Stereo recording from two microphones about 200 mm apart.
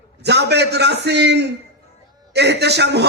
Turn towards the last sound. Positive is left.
turn(degrees=-55)  # may be behind; listen again after turning